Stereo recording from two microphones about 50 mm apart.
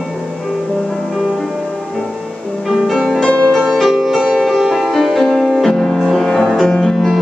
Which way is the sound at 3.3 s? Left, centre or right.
Left.